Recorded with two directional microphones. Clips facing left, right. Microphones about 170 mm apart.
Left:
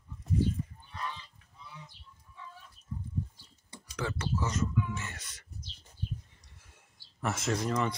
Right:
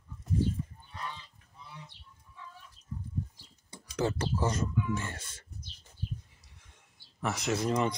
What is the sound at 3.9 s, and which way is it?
Speech, 30° right (ahead or behind).